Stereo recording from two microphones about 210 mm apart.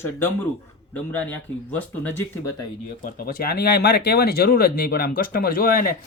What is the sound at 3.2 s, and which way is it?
Speech, 45° left (ahead or behind).